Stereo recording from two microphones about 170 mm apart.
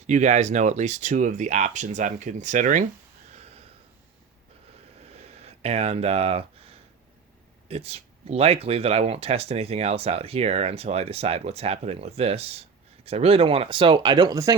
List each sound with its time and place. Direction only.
0.1 s speech: 45° right (ahead or behind)
5.0 s a sound: 35° right (ahead or behind)
7.7 s speech: 35° right (ahead or behind); by 14.5 s 20° right (ahead or behind)